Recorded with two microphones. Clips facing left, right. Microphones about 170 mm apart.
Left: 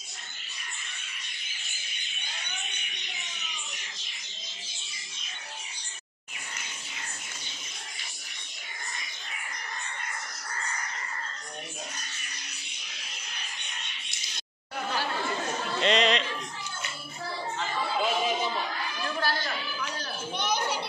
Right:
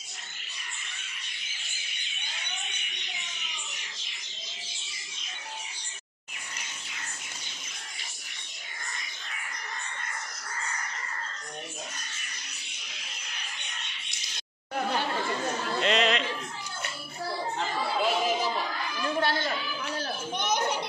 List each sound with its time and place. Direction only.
15.8 s music: 5° right (ahead or behind)
18.0 s chatter: 5° right (ahead or behind)
19.0 s a sound: 25° right (ahead or behind)
20.3 s children playing: 15° right (ahead or behind)